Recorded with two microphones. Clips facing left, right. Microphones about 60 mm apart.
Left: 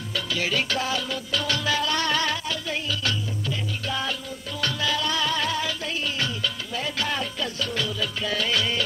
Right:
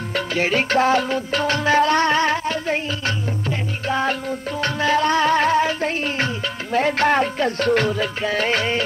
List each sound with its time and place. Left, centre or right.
0.1 s music: right